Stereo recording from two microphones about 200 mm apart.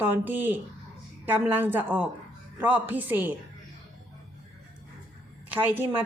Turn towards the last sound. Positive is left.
turn(degrees=-10)  # may be behind; listen again after turning